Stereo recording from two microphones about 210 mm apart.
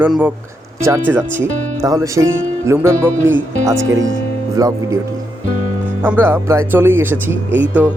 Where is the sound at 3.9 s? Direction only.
65° right (ahead or behind).